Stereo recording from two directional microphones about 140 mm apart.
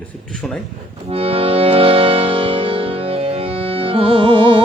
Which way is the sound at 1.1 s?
45° right (ahead or behind).